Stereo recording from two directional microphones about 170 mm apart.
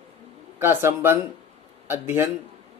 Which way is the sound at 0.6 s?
15° right (ahead or behind).